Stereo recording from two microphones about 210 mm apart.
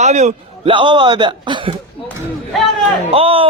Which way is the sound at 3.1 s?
25° right (ahead or behind).